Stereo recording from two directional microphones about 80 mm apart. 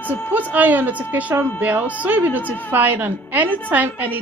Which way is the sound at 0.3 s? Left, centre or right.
Right.